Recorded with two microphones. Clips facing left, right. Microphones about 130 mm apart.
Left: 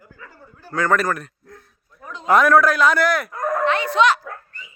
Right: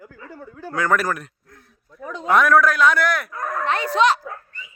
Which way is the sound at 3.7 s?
40° right (ahead or behind).